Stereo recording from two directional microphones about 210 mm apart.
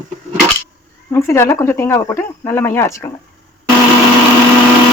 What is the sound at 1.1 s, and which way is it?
Speech, 10° left (ahead or behind).